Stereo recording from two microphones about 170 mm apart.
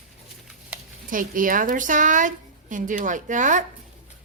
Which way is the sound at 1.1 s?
55° right (ahead or behind).